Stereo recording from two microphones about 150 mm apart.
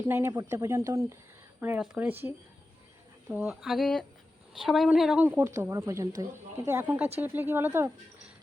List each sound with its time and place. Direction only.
0.1 s a woman's voice: 20° right (ahead or behind)
1.8 s speech: 10° right (ahead or behind)
5.4 s a woman's voice: 20° right (ahead or behind)